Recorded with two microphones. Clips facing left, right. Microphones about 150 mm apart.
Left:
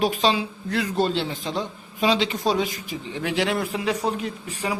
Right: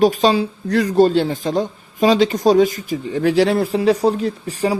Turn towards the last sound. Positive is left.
turn(degrees=-35)  # may be behind; listen again after turning